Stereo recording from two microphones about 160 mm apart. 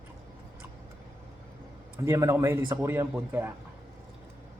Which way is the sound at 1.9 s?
15° right (ahead or behind).